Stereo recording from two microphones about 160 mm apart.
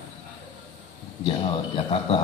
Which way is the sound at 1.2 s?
35° left (ahead or behind).